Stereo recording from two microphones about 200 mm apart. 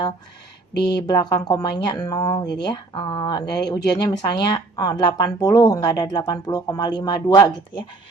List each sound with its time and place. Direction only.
0.9 s speech: 20° left (ahead or behind)